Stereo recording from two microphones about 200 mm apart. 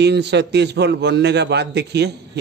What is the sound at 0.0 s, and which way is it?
A man's voice, 55° right (ahead or behind).